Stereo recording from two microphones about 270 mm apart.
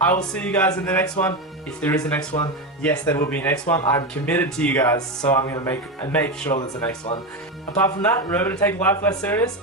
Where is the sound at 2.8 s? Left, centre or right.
Centre.